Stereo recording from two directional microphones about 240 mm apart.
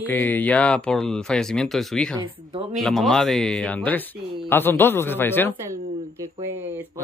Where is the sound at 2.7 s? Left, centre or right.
Centre.